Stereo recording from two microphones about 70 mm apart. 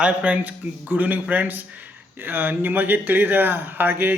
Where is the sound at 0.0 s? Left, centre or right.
Centre.